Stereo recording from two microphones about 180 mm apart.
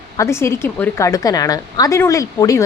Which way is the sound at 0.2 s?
15° left (ahead or behind).